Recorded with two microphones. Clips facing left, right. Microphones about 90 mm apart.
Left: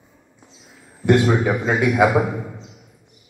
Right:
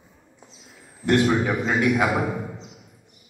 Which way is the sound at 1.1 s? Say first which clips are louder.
Left 3 dB; 20° left (ahead or behind).